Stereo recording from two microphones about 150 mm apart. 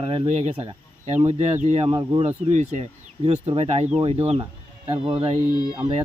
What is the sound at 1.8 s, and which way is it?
Speech, 30° right (ahead or behind).